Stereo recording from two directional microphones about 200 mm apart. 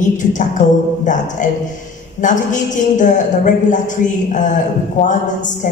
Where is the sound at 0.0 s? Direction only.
40° left (ahead or behind).